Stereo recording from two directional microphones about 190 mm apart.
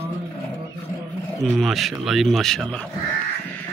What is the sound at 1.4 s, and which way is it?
Speech, centre (ahead or behind).